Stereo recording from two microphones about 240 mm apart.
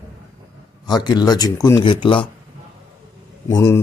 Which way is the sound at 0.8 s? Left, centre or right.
Centre.